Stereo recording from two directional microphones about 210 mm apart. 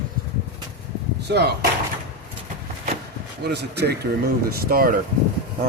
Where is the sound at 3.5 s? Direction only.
50° right (ahead or behind).